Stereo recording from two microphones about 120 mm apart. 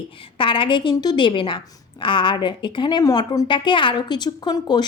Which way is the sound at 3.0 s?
30° left (ahead or behind).